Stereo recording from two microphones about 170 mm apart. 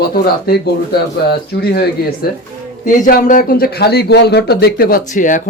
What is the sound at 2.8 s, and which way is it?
A man's voice, 55° left (ahead or behind).